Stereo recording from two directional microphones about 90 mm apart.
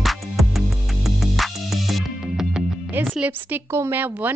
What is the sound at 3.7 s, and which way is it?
Speech, 25° right (ahead or behind).